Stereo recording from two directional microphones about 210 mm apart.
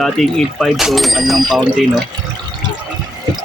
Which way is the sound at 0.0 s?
Centre (ahead or behind).